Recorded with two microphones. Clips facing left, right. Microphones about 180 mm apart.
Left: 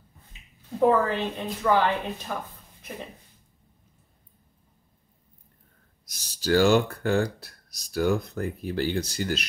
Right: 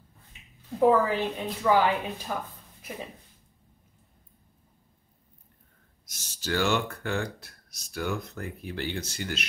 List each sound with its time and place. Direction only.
0.7 s speech: 10° right (ahead or behind)
6.0 s speech: 35° left (ahead or behind)